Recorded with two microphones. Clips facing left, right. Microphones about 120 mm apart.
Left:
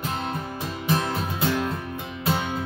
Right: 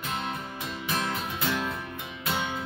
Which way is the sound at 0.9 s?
35° left (ahead or behind).